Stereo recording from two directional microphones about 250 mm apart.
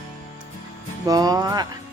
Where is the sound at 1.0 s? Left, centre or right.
Centre.